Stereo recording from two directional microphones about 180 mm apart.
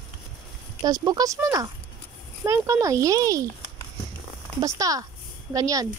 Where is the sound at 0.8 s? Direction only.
20° right (ahead or behind).